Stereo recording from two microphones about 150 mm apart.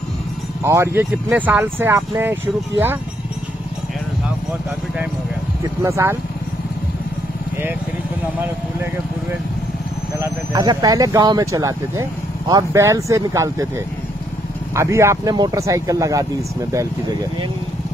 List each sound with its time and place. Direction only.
0.7 s speech: 15° right (ahead or behind)
5.6 s speech: 20° right (ahead or behind)
10.1 s speech: 20° right (ahead or behind)
14.8 s speech: 20° right (ahead or behind)